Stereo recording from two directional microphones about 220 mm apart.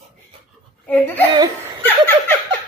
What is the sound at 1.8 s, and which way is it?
Speech, 10° left (ahead or behind).